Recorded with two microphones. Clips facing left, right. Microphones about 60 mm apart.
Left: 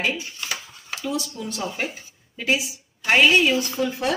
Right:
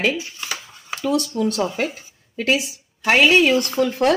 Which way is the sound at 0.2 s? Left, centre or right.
Centre.